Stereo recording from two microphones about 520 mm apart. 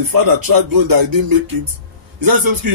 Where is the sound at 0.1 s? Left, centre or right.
Right.